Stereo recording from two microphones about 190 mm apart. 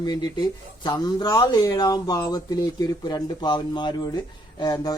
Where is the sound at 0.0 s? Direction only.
20° left (ahead or behind).